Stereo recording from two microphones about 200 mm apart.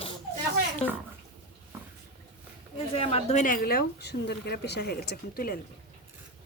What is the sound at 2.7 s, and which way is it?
A woman's voice, 30° left (ahead or behind).